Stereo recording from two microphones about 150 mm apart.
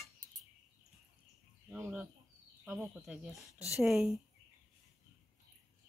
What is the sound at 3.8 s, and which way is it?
Cutlery, centre (ahead or behind).